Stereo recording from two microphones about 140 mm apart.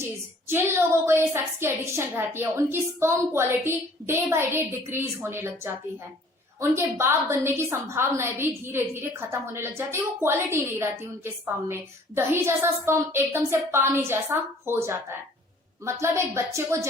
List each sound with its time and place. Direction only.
0.0 s a woman's voice: 15° right (ahead or behind)